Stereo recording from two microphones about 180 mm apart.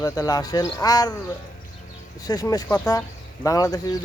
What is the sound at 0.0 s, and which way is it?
Speech, 20° left (ahead or behind).